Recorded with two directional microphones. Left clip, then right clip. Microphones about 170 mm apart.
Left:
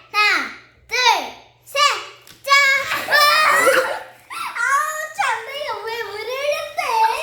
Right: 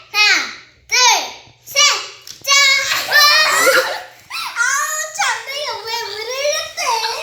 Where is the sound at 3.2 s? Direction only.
75° left (ahead or behind).